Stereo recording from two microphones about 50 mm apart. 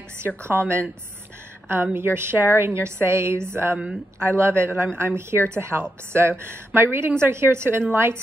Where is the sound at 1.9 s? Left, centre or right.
Right.